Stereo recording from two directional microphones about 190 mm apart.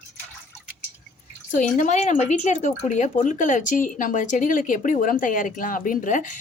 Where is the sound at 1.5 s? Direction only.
40° left (ahead or behind).